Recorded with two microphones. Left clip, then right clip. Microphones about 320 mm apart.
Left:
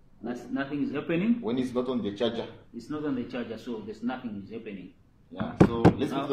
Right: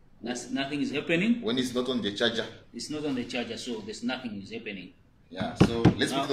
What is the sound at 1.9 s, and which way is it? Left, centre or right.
A man's voice, centre.